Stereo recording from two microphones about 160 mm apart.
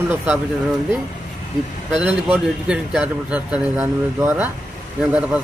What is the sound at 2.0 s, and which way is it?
Speech, 10° right (ahead or behind).